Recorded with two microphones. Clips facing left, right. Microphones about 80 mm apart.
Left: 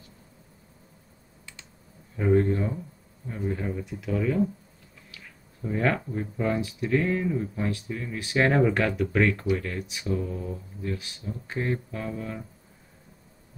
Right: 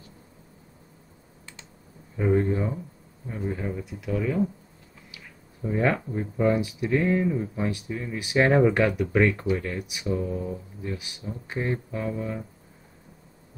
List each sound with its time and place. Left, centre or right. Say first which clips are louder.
2.1 s speech: left 1 dB; centre